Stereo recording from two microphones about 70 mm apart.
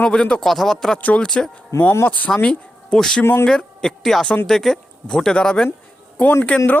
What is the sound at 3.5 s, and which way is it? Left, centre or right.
A woman's voice, centre.